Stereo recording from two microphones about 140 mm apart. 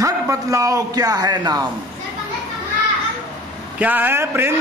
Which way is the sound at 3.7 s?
10° right (ahead or behind).